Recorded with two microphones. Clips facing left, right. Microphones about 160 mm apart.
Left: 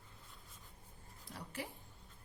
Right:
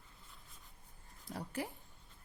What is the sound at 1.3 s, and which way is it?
Speech, 45° right (ahead or behind).